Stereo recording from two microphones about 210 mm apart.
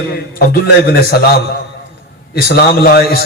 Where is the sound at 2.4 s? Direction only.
50° left (ahead or behind).